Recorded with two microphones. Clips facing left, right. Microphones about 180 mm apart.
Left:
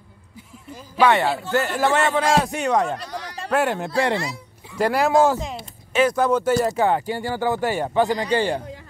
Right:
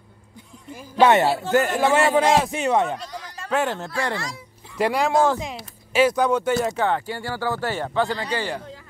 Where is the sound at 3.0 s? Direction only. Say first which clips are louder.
Left 3 dB; 70° left (ahead or behind).